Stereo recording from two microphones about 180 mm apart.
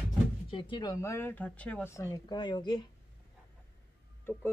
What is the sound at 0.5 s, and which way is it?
Speech, 25° left (ahead or behind).